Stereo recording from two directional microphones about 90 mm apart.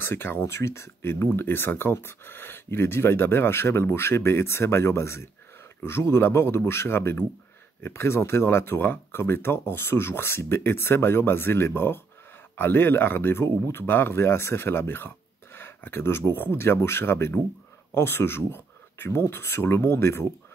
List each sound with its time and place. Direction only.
0.0 s speech: 25° left (ahead or behind)